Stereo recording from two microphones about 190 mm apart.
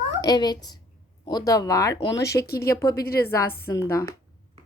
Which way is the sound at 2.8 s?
20° left (ahead or behind).